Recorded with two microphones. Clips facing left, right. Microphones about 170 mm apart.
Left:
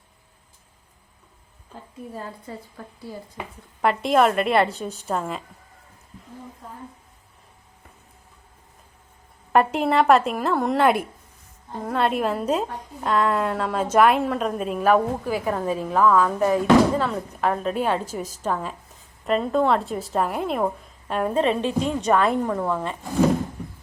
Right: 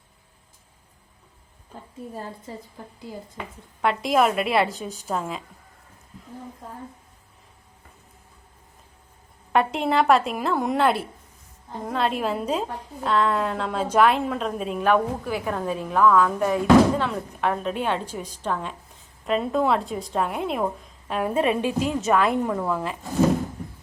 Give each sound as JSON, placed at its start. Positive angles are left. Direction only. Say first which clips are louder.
{"t": 2.7, "sound": "a woman's voice", "louder": "left 1 dB", "side_deg": -20}
{"t": 3.8, "sound": "a woman's voice", "louder": "left 2 dB", "side_deg": 0}
{"t": 9.5, "sound": "a woman's voice", "louder": "left 2 dB", "side_deg": 0}